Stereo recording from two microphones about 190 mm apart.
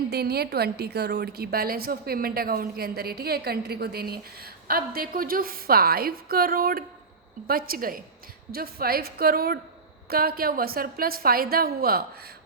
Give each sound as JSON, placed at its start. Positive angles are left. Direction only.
{"t": 0.1, "sound": "a woman's voice", "side_deg": -55}